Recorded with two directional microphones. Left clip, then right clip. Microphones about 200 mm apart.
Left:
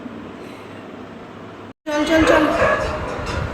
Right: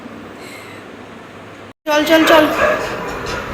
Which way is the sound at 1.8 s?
Centre (ahead or behind).